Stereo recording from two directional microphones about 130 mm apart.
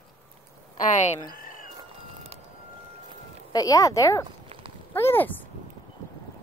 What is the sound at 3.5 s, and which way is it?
A woman's voice, 25° left (ahead or behind).